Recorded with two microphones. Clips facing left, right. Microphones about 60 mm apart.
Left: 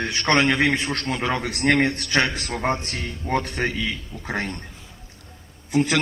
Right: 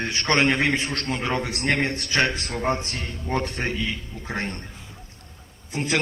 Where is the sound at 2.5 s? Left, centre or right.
Left.